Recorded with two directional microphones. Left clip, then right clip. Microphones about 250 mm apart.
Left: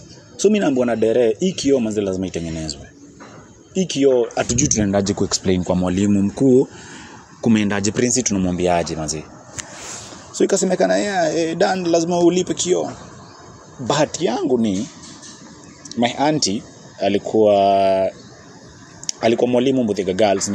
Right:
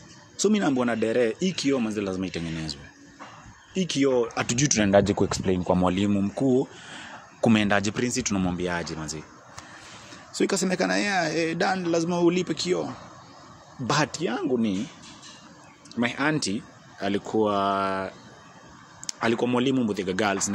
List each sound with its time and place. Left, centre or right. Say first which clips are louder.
0.4 s a man's voice: left 7 dB; right
5.4 s speech: left 4 dB; centre
7.4 s a man's voice: left 3 dB; right
7.9 s speech: left 8 dB; centre
10.3 s a man's voice: left 8 dB; right
13.8 s a man's voice: left 6 dB; right
14.2 s speech: left 8 dB; centre
15.9 s a man's voice: left 8 dB; centre